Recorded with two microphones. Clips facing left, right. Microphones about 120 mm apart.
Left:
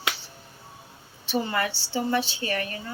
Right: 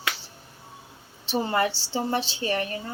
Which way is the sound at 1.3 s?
30° right (ahead or behind).